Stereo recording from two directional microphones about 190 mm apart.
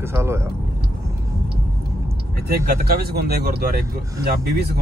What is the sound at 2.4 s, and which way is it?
Speech, 55° right (ahead or behind).